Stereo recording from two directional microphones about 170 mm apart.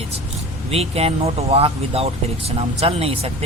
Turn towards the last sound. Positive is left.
turn(degrees=-35)  # may be behind; listen again after turning